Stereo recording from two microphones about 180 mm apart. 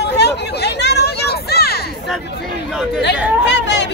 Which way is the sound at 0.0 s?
70° left (ahead or behind).